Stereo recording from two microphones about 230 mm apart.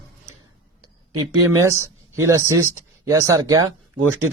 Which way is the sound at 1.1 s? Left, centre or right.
Centre.